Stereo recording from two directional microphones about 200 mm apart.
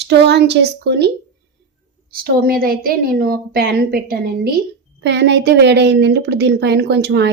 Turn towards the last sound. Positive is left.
turn(degrees=-60)  # may be behind; listen again after turning